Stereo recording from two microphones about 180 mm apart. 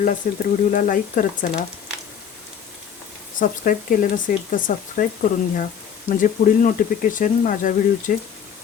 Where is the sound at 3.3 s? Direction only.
50° left (ahead or behind).